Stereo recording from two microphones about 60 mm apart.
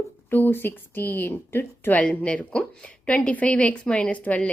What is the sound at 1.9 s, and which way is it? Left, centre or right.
A woman's voice, left.